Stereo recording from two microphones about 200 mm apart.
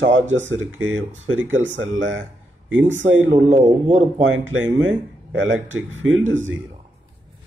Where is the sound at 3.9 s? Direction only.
80° right.